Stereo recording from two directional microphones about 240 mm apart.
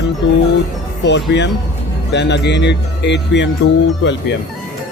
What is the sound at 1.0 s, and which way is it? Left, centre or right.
Speech, left.